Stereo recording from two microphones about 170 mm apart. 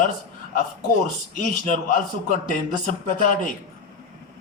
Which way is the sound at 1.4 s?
50° left (ahead or behind).